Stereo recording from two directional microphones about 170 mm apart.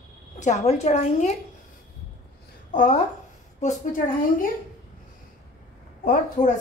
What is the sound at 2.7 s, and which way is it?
A woman's voice, 45° left (ahead or behind).